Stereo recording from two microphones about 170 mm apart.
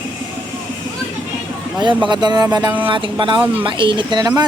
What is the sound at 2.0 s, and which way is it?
Speech, 25° right (ahead or behind).